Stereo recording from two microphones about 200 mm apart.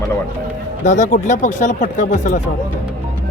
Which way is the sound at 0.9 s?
40° left (ahead or behind).